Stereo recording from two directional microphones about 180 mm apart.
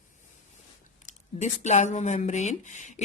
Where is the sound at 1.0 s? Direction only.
40° left (ahead or behind).